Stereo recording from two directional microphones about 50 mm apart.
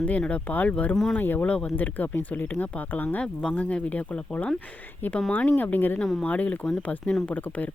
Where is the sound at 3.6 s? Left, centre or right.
Left.